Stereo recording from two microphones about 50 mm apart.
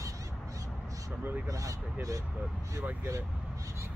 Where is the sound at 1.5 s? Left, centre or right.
Right.